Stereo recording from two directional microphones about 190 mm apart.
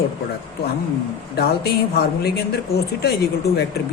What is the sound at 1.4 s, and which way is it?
Speech, 55° left (ahead or behind).